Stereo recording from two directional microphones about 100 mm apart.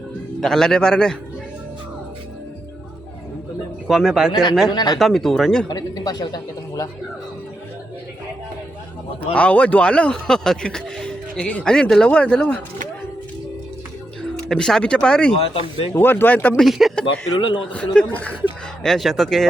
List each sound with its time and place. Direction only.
0.3 s speech: 5° left (ahead or behind)
3.8 s speech: 5° right (ahead or behind)
4.3 s speech: 55° left (ahead or behind)
4.9 s speech: centre (ahead or behind)
5.6 s speech: 40° left (ahead or behind)
9.3 s speech: 15° left (ahead or behind)
14.2 s speech: 5° left (ahead or behind)
16.0 s speech: 20° left (ahead or behind)
16.6 s speech: centre (ahead or behind)
17.1 s a man's voice: 60° left (ahead or behind)
17.7 s speech: 10° left (ahead or behind)
18.8 s speech: 5° left (ahead or behind)